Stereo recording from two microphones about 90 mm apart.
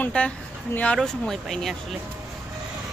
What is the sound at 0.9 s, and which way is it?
Speech, 5° left (ahead or behind).